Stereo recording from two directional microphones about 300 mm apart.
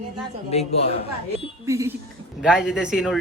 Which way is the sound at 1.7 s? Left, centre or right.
Centre.